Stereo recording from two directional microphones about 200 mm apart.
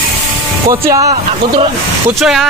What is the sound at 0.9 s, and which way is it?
Speech, 25° right (ahead or behind).